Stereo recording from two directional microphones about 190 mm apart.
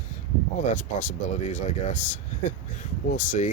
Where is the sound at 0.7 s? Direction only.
40° left (ahead or behind).